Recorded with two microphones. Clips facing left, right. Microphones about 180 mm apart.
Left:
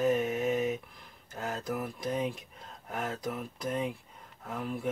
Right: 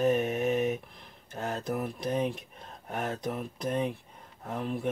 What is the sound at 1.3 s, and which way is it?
Mantra, 30° right (ahead or behind).